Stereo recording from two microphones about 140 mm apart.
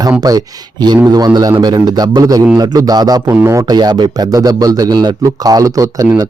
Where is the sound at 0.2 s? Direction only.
30° right (ahead or behind).